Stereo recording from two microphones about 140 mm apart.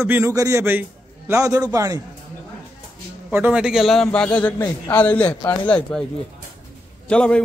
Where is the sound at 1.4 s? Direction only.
25° right (ahead or behind).